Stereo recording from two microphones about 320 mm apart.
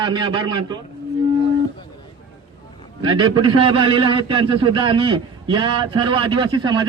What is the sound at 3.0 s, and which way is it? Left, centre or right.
A man's voice, centre.